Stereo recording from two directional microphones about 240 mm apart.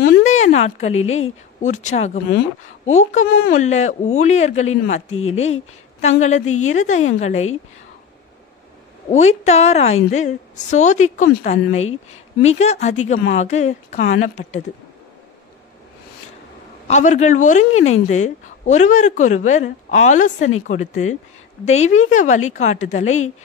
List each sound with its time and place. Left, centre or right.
0.0 s a sound: left
1.6 s a woman's voice: left
5.1 s speech: left
5.4 s a woman's voice: left
9.1 s a woman's voice: left
16.8 s a woman's voice: left